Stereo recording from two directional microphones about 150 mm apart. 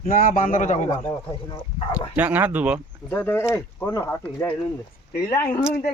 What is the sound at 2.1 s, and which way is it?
Speech, 10° right (ahead or behind).